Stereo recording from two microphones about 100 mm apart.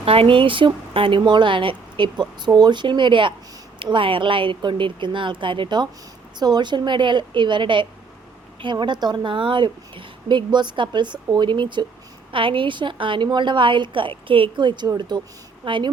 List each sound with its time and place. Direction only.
0.0 s a woman's voice: 75° right (ahead or behind); by 15.9 s 55° right (ahead or behind)